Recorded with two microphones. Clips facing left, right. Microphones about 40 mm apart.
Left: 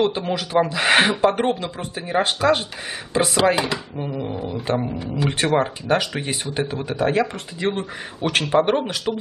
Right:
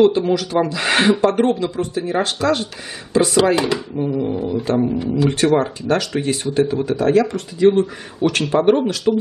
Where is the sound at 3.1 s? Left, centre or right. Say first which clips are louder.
Right 3 dB; centre.